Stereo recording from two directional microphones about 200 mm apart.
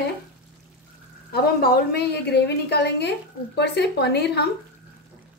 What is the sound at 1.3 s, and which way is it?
A woman's voice, 50° left (ahead or behind).